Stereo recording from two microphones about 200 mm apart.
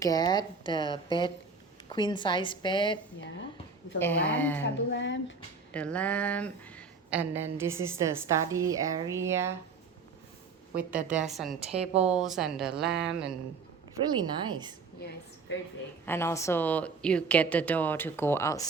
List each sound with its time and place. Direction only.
0.0 s speech: 20° left (ahead or behind)
4.0 s a woman's voice: 10° left (ahead or behind)
4.6 s speech: 65° left (ahead or behind)
5.7 s a woman's voice: 5° left (ahead or behind)
7.1 s a woman's voice: 10° right (ahead or behind)
10.8 s a woman's voice: 5° right (ahead or behind)
11.6 s a woman's voice: 30° right (ahead or behind)
12.0 s speech: centre (ahead or behind)
14.1 s a woman's voice: 20° right (ahead or behind)
15.0 s a woman's voice: 50° left (ahead or behind)
16.0 s a woman's voice: 10° left (ahead or behind)